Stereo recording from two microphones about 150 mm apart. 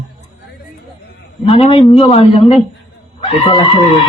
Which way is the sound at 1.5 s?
40° left (ahead or behind).